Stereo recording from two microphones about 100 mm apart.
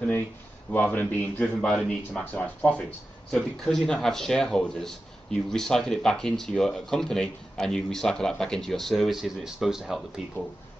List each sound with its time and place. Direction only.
0.7 s a man's voice: 15° left (ahead or behind); by 10.2 s 5° right (ahead or behind)